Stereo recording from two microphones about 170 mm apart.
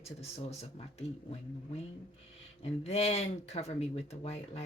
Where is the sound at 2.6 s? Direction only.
40° left (ahead or behind).